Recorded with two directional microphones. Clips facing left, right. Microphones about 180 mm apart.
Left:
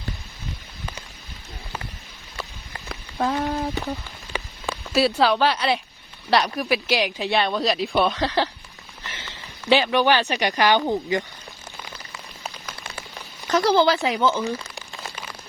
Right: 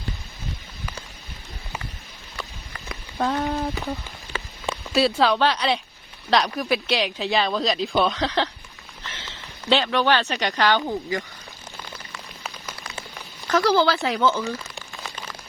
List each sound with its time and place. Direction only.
2.9 s a sound: centre (ahead or behind)
4.9 s a woman's voice: centre (ahead or behind); by 11.2 s 20° left (ahead or behind)
13.5 s speech: 20° left (ahead or behind)